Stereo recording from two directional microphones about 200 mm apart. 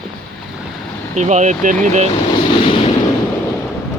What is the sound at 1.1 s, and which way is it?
Speech, 35° right (ahead or behind).